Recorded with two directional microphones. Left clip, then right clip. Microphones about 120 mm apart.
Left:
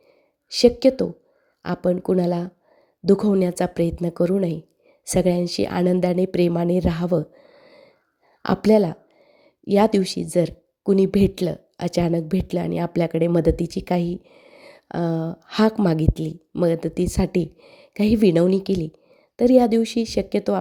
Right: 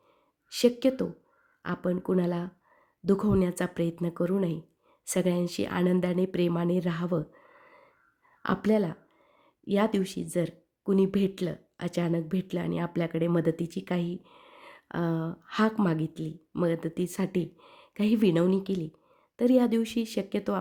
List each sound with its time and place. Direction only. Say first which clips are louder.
0.5 s a woman's voice: left 9 dB; 30° left (ahead or behind)